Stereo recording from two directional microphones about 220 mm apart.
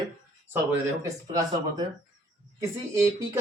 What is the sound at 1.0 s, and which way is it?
Speech, 15° right (ahead or behind).